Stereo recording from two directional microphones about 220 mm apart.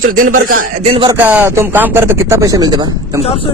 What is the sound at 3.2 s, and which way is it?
Speech, 25° left (ahead or behind).